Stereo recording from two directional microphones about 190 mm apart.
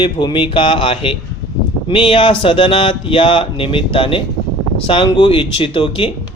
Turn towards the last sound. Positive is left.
turn(degrees=25)  # may be behind; listen again after turning